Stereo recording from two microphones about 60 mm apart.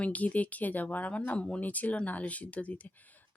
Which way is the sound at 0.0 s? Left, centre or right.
Left.